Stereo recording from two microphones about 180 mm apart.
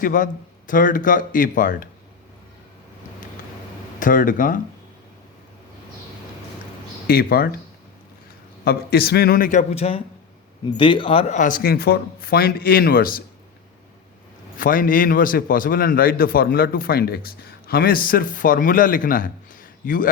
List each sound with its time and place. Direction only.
0.0 s a man's voice: 50° left (ahead or behind)
4.0 s a man's voice: 45° left (ahead or behind)
7.1 s speech: 55° left (ahead or behind)
8.6 s a man's voice: 60° left (ahead or behind)
14.6 s a man's voice: 50° left (ahead or behind)